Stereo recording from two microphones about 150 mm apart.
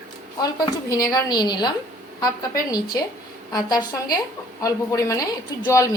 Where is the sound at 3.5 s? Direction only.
25° left (ahead or behind).